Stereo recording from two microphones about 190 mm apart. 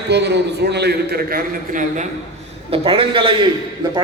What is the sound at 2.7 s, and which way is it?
Speech, 30° right (ahead or behind).